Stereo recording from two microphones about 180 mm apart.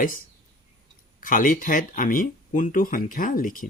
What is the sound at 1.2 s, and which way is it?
Speech, 50° left (ahead or behind).